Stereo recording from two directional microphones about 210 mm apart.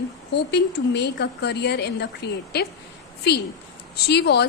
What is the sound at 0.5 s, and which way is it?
Speech, 55° left (ahead or behind).